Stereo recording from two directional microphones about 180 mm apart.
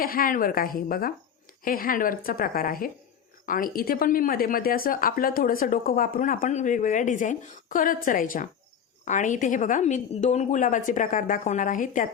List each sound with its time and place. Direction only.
0.0 s a woman's voice: 55° left (ahead or behind)